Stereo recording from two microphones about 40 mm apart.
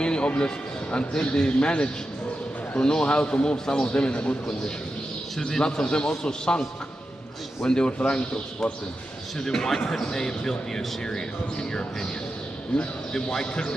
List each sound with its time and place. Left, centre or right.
0.0 s a sound: left
0.9 s a man's voice: left
5.4 s a man's voice: left
7.6 s a man's voice: left
12.7 s a man's voice: centre